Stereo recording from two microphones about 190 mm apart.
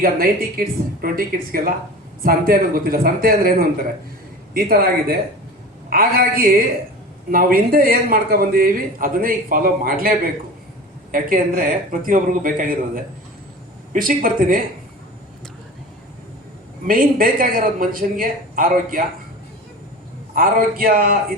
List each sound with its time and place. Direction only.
0.0 s speech: 50° right (ahead or behind)
13.9 s speech: 45° right (ahead or behind)
16.8 s speech: 45° right (ahead or behind)
20.3 s speech: 50° right (ahead or behind)